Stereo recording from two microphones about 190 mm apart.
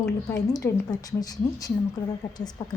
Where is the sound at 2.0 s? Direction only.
15° left (ahead or behind).